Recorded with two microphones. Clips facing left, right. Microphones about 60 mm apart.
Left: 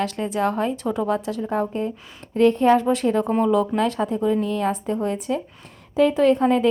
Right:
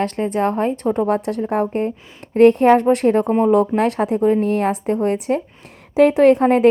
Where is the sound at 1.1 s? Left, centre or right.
Right.